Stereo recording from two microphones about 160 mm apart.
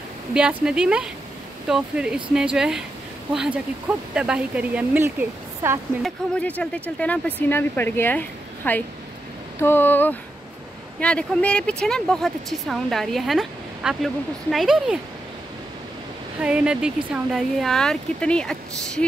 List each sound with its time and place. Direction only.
0.3 s speech: 5° right (ahead or behind)
4.1 s speech: 5° right (ahead or behind)
6.0 s speech: 5° left (ahead or behind)
16.3 s speech: 5° right (ahead or behind)